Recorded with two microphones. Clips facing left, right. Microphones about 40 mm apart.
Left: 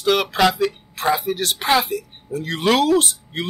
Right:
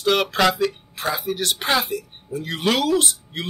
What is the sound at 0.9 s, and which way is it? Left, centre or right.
Speech, left.